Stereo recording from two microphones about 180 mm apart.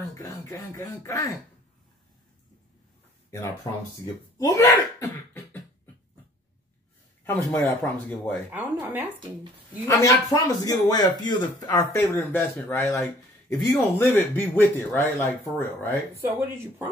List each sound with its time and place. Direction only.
0.1 s speech: 20° left (ahead or behind)
3.3 s speech: 15° left (ahead or behind)
7.3 s speech: 10° left (ahead or behind)
8.5 s speech: 10° right (ahead or behind)
9.8 s speech: 15° left (ahead or behind)
16.3 s speech: 15° right (ahead or behind)